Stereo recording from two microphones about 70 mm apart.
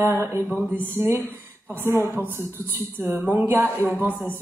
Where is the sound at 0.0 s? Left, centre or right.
Right.